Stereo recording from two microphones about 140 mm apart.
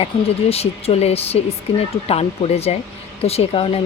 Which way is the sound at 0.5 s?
45° left (ahead or behind).